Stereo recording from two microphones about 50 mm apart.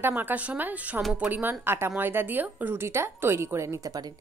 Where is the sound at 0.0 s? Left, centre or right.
Right.